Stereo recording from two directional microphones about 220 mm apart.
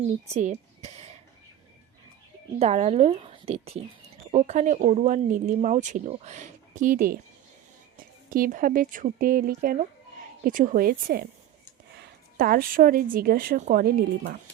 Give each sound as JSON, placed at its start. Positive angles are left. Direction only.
{"t": 0.3, "sound": "speech", "side_deg": -30}
{"t": 2.6, "sound": "a woman's voice", "side_deg": -30}
{"t": 8.3, "sound": "speech", "side_deg": -40}